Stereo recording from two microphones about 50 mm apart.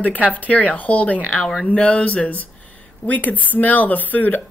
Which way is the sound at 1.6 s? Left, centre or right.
Left.